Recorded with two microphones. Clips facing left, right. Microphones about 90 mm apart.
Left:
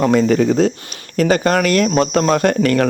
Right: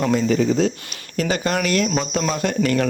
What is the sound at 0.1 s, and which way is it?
Speech, 60° left (ahead or behind).